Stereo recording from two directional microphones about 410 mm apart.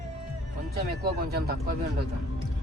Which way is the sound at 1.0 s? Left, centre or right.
Right.